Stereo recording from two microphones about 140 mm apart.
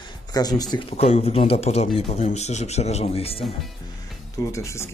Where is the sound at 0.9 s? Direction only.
50° left (ahead or behind).